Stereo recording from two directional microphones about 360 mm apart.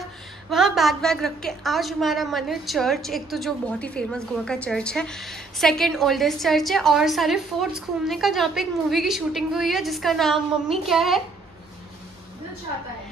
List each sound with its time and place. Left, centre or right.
0.5 s a woman's voice: centre